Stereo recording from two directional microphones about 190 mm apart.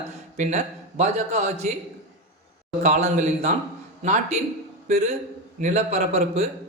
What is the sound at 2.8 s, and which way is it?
A man's voice, 40° right (ahead or behind).